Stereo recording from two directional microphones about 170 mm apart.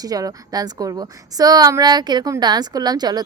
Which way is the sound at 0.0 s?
20° right (ahead or behind).